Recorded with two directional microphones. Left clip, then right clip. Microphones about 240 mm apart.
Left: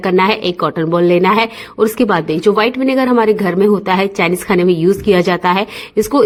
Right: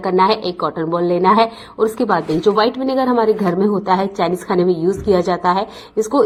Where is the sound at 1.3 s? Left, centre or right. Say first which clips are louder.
Left 1 dB; left.